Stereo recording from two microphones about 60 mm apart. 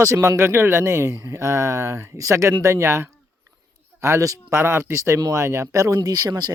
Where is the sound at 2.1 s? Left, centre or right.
Right.